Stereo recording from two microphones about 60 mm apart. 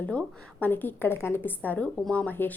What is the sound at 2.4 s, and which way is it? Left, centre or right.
Speech, left.